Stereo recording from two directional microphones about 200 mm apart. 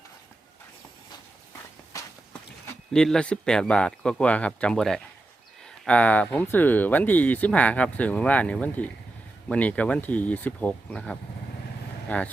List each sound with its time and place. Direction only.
1.9 s walk: 15° left (ahead or behind)
2.9 s a man's voice: 5° left (ahead or behind)